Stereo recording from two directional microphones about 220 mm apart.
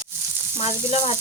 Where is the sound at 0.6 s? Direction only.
30° left (ahead or behind).